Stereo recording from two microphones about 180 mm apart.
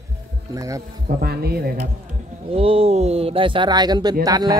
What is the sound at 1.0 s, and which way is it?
Speech, 60° right (ahead or behind).